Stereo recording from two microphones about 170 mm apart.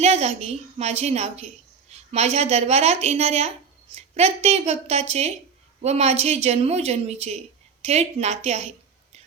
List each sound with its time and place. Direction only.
0.0 s a woman's voice: 40° right (ahead or behind)